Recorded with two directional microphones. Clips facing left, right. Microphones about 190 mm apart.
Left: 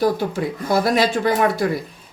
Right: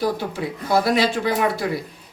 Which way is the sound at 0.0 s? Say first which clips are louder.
Left 4 dB; 45° left (ahead or behind).